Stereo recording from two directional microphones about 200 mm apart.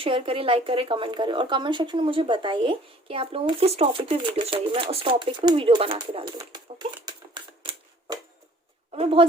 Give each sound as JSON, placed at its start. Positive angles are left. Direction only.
{"t": 0.0, "sound": "speech", "side_deg": -25}